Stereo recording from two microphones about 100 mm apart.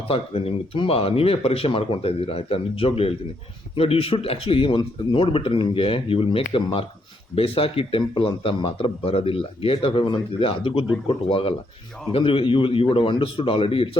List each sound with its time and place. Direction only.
0.1 s a man's voice: 75° left (ahead or behind)